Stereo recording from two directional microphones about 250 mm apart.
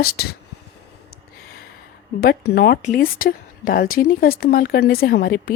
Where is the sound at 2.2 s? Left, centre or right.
Left.